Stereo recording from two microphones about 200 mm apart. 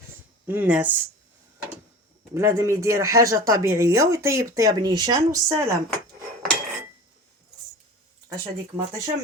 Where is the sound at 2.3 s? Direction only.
15° right (ahead or behind).